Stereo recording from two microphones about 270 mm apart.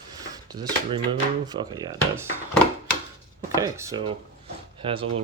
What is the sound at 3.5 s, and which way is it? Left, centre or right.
Speech, centre.